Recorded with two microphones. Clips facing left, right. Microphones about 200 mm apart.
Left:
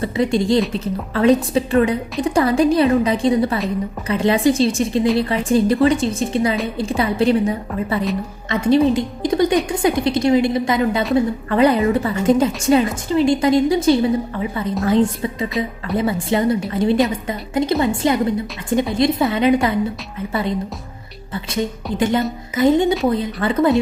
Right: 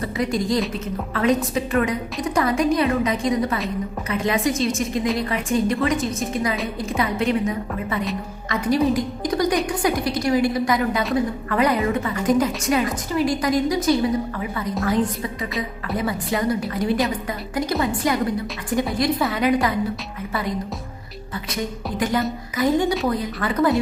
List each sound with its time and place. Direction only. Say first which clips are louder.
0.0 s a woman's voice: left 5 dB; 30° left (ahead or behind)
21.3 s a woman's voice: left 5 dB; 25° left (ahead or behind)